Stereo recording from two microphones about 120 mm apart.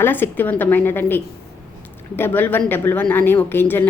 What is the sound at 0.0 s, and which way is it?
A woman's voice, 15° left (ahead or behind).